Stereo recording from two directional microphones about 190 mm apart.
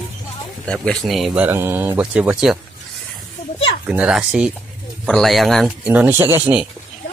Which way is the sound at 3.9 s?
5° right (ahead or behind).